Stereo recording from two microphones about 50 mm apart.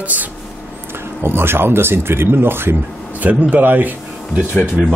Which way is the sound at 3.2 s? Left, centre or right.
Right.